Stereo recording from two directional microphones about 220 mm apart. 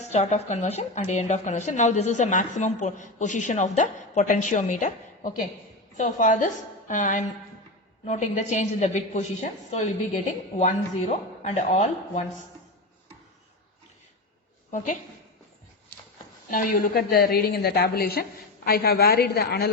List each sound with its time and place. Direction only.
0.0 s speech: 30° left (ahead or behind)
16.5 s a woman's voice: 40° left (ahead or behind)